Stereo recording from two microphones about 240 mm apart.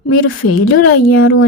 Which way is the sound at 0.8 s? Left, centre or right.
Left.